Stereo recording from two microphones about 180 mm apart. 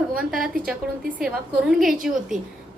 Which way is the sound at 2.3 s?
45° right (ahead or behind).